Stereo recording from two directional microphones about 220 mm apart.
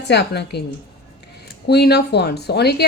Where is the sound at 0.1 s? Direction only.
50° left (ahead or behind).